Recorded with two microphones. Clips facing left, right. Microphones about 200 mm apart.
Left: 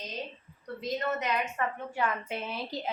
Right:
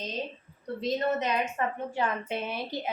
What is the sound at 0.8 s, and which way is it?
A woman's voice, 25° right (ahead or behind).